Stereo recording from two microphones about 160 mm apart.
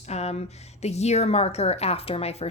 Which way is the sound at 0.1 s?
45° left (ahead or behind).